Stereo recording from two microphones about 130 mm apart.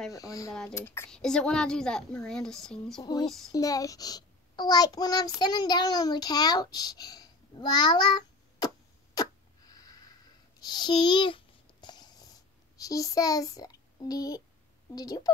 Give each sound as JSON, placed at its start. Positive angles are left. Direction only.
{"t": 0.1, "sound": "speech", "side_deg": 25}
{"t": 0.5, "sound": "a woman's voice", "side_deg": 5}
{"t": 0.7, "sound": "speech", "side_deg": 20}
{"t": 1.1, "sound": "a woman's voice", "side_deg": 5}
{"t": 3.0, "sound": "female singing", "side_deg": 30}
{"t": 3.3, "sound": "a woman's voice", "side_deg": 0}
{"t": 3.5, "sound": "a child's voice", "side_deg": 25}
{"t": 10.6, "sound": "babbling", "side_deg": 35}
{"t": 12.7, "sound": "a child's voice", "side_deg": 25}